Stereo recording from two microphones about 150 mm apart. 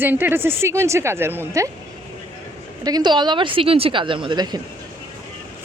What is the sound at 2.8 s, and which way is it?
A woman's voice, 25° right (ahead or behind).